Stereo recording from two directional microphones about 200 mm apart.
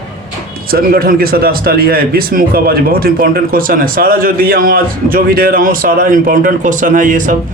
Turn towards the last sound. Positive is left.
turn(degrees=-40)  # may be behind; listen again after turning